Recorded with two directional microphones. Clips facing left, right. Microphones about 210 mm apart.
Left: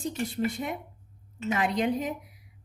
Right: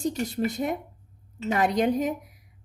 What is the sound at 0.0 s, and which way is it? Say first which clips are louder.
A woman's voice: right 3 dB; 40° right (ahead or behind).